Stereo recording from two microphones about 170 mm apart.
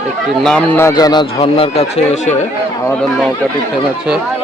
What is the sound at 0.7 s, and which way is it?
Speech, 20° left (ahead or behind).